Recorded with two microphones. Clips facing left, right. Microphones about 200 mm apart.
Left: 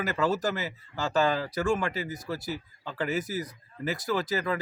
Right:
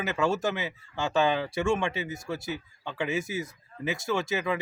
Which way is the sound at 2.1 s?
20° right (ahead or behind).